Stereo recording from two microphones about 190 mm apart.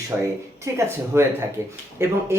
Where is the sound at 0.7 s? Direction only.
15° right (ahead or behind).